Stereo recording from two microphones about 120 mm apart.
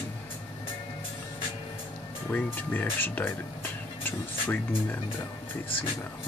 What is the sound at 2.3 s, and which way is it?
Speech, 15° left (ahead or behind).